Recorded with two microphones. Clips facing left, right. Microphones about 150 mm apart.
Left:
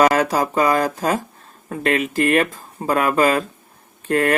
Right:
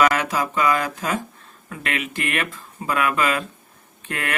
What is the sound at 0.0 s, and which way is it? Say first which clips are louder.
Speech: left 4 dB; 40° left (ahead or behind).